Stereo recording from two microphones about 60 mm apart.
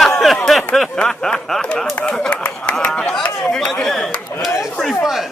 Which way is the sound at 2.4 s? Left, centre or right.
Left.